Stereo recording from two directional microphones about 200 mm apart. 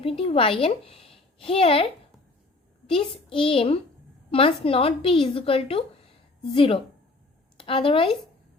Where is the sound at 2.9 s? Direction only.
25° left (ahead or behind).